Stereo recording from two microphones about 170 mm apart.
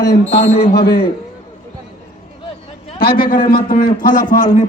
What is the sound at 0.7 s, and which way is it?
Speech, 70° left (ahead or behind).